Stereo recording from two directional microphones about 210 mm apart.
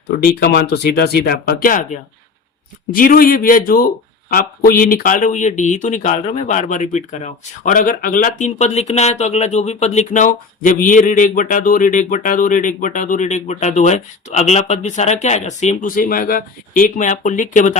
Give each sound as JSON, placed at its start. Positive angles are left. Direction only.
{"t": 0.2, "sound": "speech", "side_deg": 50}